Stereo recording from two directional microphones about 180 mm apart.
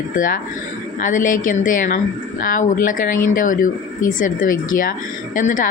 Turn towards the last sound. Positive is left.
turn(degrees=45)  # may be behind; listen again after turning